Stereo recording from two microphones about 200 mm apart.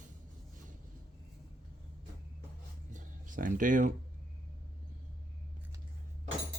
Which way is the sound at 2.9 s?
40° right (ahead or behind).